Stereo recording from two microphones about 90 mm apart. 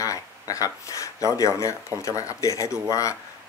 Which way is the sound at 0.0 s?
40° left (ahead or behind).